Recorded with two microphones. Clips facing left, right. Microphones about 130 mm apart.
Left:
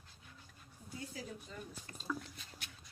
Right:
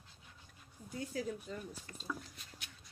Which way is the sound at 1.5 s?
45° right (ahead or behind).